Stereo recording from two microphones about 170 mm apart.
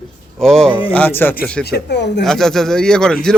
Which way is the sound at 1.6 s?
80° left.